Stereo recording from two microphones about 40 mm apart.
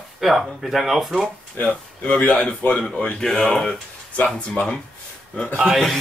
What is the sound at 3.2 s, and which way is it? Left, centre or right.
Speech, centre.